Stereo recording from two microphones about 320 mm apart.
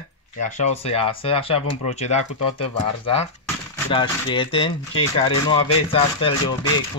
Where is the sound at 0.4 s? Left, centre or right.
Left.